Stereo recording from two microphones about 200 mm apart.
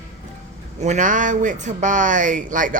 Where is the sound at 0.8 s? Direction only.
35° right (ahead or behind).